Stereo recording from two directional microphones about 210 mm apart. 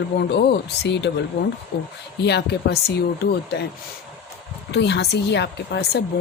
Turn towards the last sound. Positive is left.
turn(degrees=50)  # may be behind; listen again after turning